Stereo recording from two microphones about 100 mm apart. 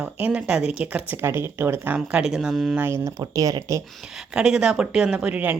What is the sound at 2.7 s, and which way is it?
Speech, 25° right (ahead or behind).